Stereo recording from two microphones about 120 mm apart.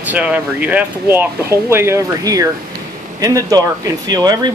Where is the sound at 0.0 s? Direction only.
10° right (ahead or behind).